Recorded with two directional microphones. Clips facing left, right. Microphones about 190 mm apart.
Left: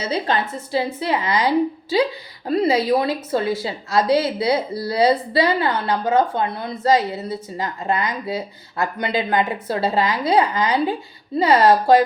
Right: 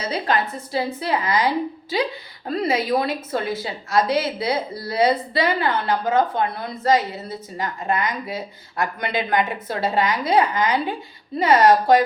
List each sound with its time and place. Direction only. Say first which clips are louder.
0.0 s a woman's voice: left 1 dB; 25° left (ahead or behind)
2.5 s a woman's voice: left 4 dB; 25° left (ahead or behind)